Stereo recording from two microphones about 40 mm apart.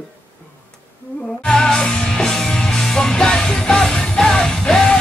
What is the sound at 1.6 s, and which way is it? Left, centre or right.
Music, centre.